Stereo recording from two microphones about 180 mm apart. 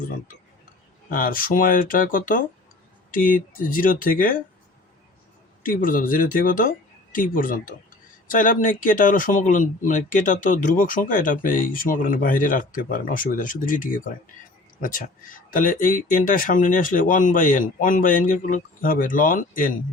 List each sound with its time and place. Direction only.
1.1 s speech: 50° left (ahead or behind)
5.6 s speech: 50° left (ahead or behind)